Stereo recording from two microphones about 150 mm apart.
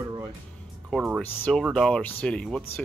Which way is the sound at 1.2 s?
10° left (ahead or behind).